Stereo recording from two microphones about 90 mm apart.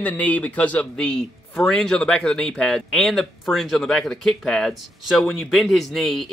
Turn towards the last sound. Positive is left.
turn(degrees=0)  # may be behind; listen again after turning